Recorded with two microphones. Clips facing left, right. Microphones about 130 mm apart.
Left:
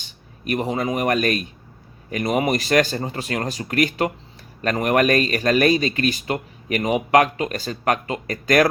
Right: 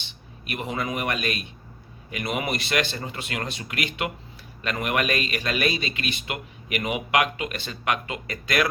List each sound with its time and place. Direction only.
0.0 s speech: 40° left (ahead or behind)